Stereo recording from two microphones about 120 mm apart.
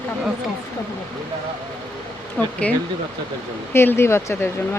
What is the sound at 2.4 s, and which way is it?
Speech, 5° left (ahead or behind).